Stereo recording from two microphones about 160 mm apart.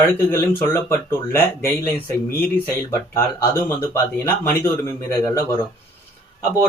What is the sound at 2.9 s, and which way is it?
Speech, 15° left (ahead or behind).